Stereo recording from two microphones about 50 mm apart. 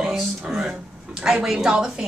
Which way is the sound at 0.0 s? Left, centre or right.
Centre.